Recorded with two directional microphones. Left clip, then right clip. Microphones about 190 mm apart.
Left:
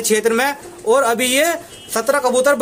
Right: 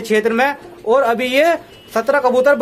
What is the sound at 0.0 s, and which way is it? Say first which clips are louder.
Speech: right 1 dB; 5° left (ahead or behind).